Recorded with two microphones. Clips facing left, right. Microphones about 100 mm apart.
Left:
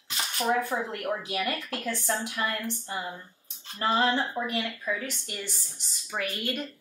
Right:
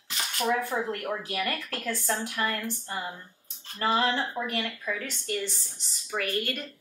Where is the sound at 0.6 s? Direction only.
15° left (ahead or behind).